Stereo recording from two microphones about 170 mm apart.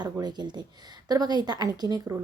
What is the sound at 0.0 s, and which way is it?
Speech, 25° right (ahead or behind).